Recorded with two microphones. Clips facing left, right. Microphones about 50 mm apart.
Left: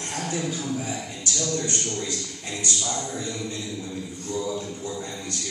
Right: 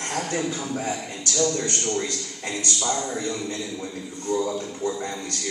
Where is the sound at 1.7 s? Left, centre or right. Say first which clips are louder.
Right 4 dB; right.